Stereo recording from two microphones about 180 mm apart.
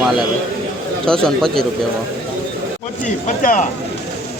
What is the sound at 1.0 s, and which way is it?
Speech, 5° left (ahead or behind).